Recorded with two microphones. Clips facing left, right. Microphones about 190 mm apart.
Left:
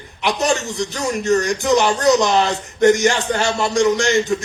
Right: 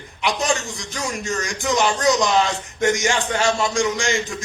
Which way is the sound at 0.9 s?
35° left (ahead or behind).